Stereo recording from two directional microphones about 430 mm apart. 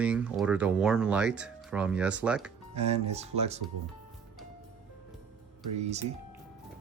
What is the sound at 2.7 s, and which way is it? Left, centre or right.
Speech, centre.